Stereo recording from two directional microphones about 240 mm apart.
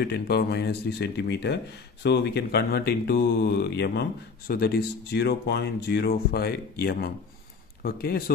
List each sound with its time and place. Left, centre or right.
0.0 s speech: left